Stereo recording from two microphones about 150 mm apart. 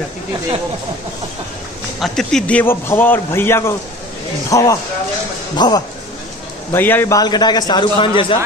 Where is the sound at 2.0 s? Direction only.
5° left (ahead or behind); by 5.8 s 30° left (ahead or behind).